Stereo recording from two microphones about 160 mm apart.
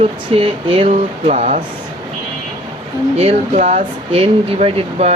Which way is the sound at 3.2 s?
40° right (ahead or behind).